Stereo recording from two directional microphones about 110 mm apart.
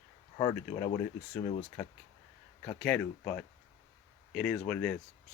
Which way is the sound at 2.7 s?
10° left (ahead or behind).